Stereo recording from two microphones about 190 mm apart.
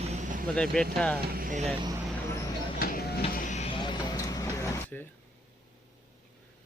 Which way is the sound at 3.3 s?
40° left (ahead or behind).